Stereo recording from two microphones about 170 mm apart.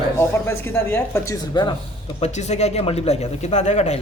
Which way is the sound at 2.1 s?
40° left (ahead or behind).